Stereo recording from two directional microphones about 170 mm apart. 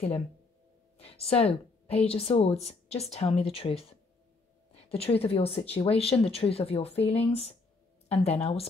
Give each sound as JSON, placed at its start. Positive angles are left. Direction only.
{"t": 0.9, "sound": "a woman's voice", "side_deg": 35}